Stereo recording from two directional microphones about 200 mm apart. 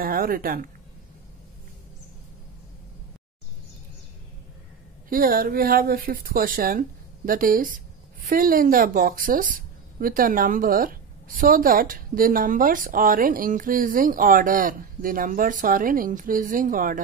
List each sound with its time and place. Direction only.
0.0 s speech: 45° right (ahead or behind)
5.1 s speech: 45° right (ahead or behind)